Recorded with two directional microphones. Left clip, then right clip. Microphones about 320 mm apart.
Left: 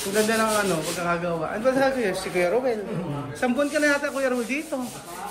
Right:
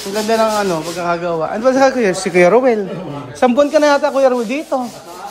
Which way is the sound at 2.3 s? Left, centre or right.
Right.